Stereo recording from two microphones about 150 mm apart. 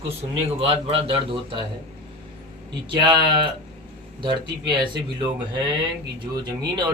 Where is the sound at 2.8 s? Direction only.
30° right (ahead or behind).